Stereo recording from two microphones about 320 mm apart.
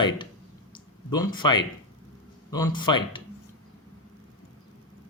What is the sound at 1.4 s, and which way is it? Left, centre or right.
Speech, centre.